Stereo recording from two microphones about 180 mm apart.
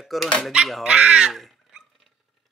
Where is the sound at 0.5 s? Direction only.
5° right (ahead or behind).